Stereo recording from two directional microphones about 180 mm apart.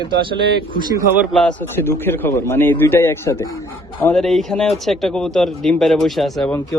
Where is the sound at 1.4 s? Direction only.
10° left (ahead or behind).